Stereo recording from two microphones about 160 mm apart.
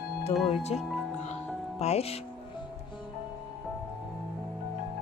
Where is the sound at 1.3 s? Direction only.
40° left (ahead or behind).